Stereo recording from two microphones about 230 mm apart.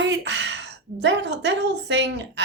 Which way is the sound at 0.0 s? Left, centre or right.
Right.